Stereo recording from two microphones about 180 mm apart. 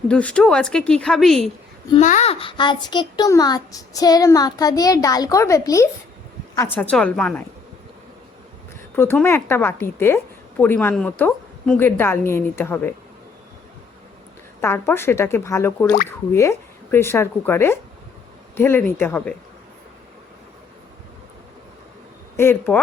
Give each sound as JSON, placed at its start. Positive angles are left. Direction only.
{"t": 0.1, "sound": "a woman's voice", "side_deg": 5}
{"t": 2.0, "sound": "a woman's voice", "side_deg": 40}
{"t": 9.0, "sound": "a woman's voice", "side_deg": 10}
{"t": 14.6, "sound": "a woman's voice", "side_deg": 15}
{"t": 22.4, "sound": "a woman's voice", "side_deg": 10}